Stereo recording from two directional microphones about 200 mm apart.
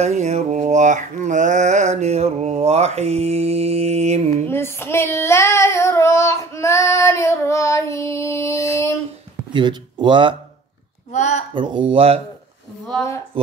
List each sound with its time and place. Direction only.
0.0 s a sound: 35° right (ahead or behind)
4.5 s child singing: 10° left (ahead or behind)
9.5 s speech: 25° right (ahead or behind)
11.1 s speech: 35° left (ahead or behind)
11.5 s speech: 25° right (ahead or behind)